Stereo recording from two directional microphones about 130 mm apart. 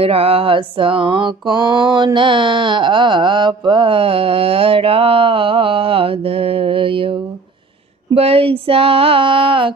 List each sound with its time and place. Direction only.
0.0 s mantra: 45° right (ahead or behind)